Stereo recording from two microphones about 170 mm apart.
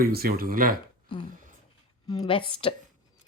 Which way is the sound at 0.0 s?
60° right (ahead or behind).